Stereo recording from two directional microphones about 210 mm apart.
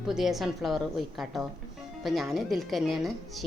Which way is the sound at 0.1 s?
Centre (ahead or behind).